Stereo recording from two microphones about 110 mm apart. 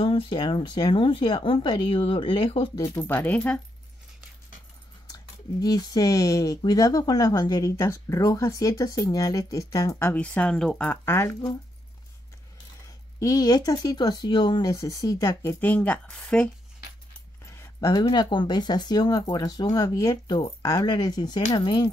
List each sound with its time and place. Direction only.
0.0 s speech: 55° left (ahead or behind)
2.7 s speech: 35° left (ahead or behind)
3.0 s speech: 15° left (ahead or behind)
5.0 s speech: 35° left (ahead or behind)
10.1 s speech: 10° left (ahead or behind)
10.9 s speech: 20° left (ahead or behind)
13.2 s speech: 35° left (ahead or behind)
15.6 s speech: 15° left (ahead or behind)
17.5 s speech: 30° left (ahead or behind)